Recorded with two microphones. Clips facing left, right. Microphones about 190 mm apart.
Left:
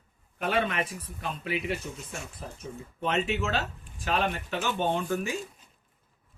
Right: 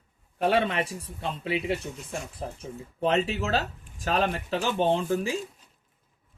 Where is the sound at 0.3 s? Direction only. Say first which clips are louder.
Right 4 dB; 30° right (ahead or behind).